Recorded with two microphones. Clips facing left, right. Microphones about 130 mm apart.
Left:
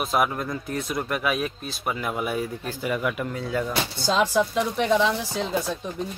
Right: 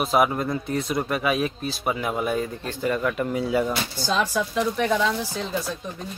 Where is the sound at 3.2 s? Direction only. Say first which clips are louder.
Right 4 dB; 10° right (ahead or behind).